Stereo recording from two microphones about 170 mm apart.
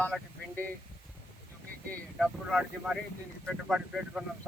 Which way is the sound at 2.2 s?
5° right (ahead or behind).